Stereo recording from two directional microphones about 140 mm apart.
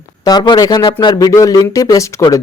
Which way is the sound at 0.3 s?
30° left (ahead or behind).